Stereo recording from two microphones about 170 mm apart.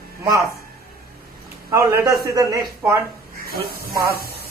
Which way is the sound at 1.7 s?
15° right (ahead or behind).